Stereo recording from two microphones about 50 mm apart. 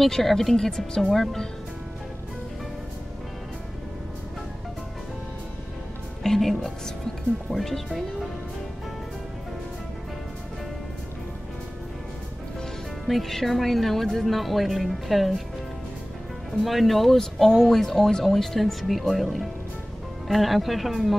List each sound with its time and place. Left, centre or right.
0.0 s speech: centre
6.2 s speech: centre
13.0 s speech: centre
16.6 s speech: centre